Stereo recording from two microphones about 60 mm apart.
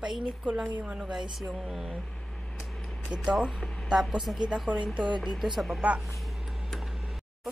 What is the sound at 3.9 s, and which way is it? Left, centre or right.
A woman's voice, centre.